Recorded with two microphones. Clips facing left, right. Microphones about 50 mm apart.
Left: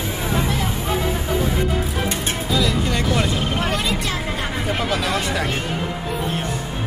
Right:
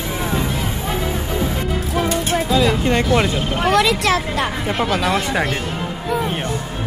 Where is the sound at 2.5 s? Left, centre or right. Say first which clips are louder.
Right 3 dB; right.